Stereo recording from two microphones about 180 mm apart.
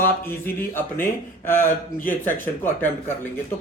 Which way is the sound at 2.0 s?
10° left (ahead or behind).